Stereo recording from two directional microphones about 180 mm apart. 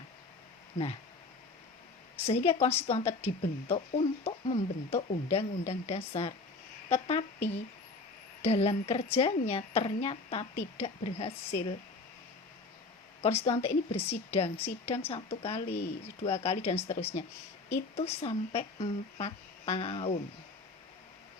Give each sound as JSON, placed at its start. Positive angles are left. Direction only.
{"t": 2.2, "sound": "a woman's voice", "side_deg": 35}
{"t": 8.4, "sound": "speech", "side_deg": 35}
{"t": 13.2, "sound": "speech", "side_deg": 35}